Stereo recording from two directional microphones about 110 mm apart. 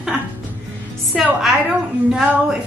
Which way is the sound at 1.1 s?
Centre (ahead or behind).